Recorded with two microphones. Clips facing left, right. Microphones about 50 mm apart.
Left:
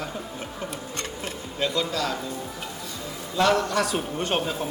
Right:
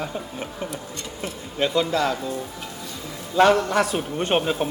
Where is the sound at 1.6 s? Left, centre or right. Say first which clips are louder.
Right 5 dB; right.